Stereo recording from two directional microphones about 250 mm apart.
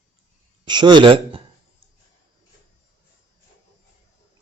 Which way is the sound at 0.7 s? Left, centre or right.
Centre.